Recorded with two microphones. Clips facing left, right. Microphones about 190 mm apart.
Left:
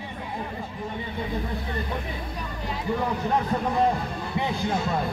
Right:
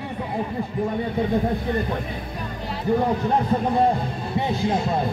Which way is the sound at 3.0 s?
30° right (ahead or behind).